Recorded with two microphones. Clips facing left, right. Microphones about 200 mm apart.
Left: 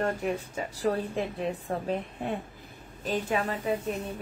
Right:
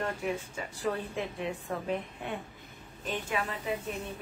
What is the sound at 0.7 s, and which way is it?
A woman's voice, 35° left (ahead or behind).